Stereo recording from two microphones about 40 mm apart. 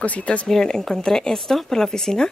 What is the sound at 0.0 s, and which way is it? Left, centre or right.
Speech, left.